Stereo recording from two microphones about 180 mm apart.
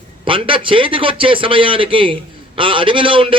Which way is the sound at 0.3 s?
30° right (ahead or behind).